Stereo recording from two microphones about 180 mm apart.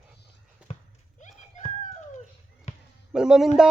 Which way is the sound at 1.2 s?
40° left (ahead or behind).